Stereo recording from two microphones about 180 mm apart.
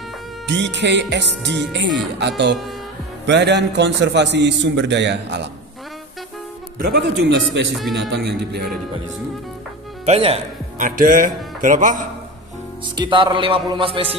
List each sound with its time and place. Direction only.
0.5 s a man's voice: 80° right
6.8 s a man's voice: 70° right (ahead or behind)
10.0 s speech: 35° right (ahead or behind)
11.0 s speech: 50° right (ahead or behind)
12.9 s a man's voice: 25° right (ahead or behind)